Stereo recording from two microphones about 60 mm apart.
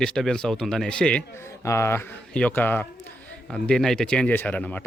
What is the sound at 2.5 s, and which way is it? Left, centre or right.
Speech, left.